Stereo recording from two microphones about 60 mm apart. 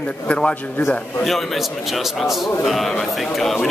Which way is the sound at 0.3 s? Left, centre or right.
Centre.